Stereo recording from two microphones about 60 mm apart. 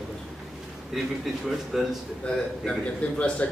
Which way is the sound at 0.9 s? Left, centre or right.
Centre.